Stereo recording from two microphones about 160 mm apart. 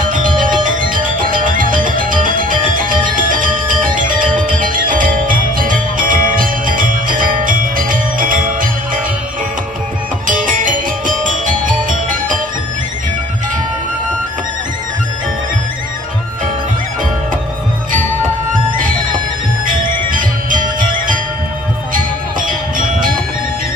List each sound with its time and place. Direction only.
0.0 s music: 55° right (ahead or behind)
10.2 s music: 55° right (ahead or behind)
19.6 s music: 60° right (ahead or behind)